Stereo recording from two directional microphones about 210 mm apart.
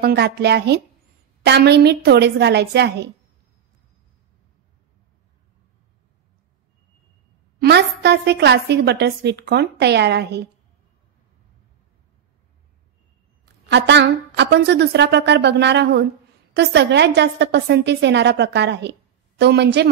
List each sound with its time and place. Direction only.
0.0 s a woman's voice: 50° right (ahead or behind)
7.6 s a woman's voice: 50° right (ahead or behind)
13.7 s a woman's voice: 55° right (ahead or behind)